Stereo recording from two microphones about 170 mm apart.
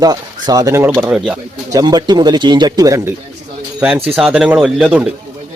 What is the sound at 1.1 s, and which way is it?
Speech, 5° right (ahead or behind).